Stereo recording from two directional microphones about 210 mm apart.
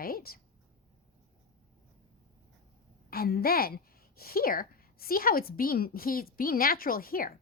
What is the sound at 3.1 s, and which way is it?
A woman's voice, 45° left (ahead or behind).